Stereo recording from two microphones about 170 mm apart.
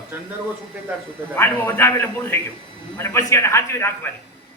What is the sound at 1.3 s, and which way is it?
A man's voice, 10° left (ahead or behind).